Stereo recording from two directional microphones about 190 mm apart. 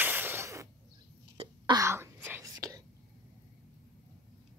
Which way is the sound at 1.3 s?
25° right (ahead or behind).